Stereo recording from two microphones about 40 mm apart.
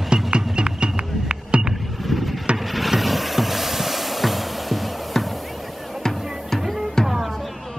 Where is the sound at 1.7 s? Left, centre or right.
Centre.